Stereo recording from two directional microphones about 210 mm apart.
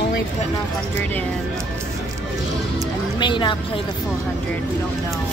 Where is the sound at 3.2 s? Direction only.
20° left (ahead or behind).